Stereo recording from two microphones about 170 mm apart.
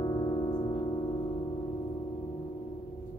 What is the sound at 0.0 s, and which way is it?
Music, 25° left (ahead or behind).